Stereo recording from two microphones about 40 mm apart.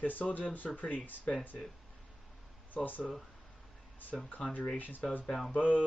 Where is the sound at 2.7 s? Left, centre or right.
Left.